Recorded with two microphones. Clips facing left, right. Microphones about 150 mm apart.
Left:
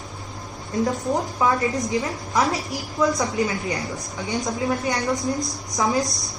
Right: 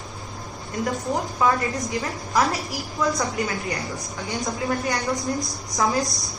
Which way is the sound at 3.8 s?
Centre (ahead or behind).